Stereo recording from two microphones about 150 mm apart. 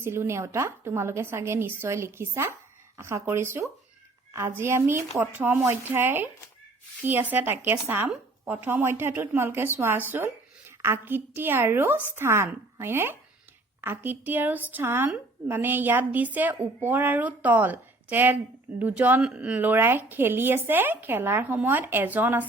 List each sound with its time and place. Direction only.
0.0 s a woman's voice: 15° right (ahead or behind)